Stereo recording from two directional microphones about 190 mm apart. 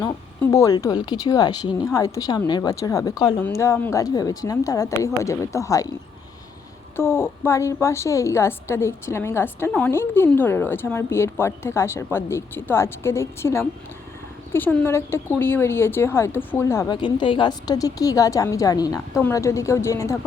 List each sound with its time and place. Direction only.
0.0 s a woman's voice: 15° left (ahead or behind)
6.9 s a woman's voice: 10° left (ahead or behind)